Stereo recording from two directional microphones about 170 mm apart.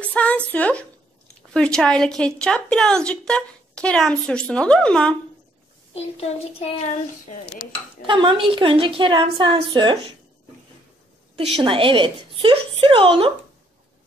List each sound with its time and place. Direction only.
0.0 s a sound: 10° left (ahead or behind)
0.5 s speech: 10° left (ahead or behind)
5.9 s speech: 35° left (ahead or behind)
8.1 s a woman's voice: 30° right (ahead or behind)
11.5 s a woman's voice: 30° right (ahead or behind)